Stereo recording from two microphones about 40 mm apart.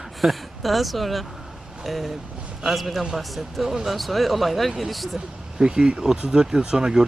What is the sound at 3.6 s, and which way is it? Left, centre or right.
Speech, centre.